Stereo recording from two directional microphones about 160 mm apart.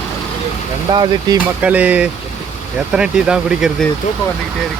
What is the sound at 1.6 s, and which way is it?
Speech, 10° right (ahead or behind).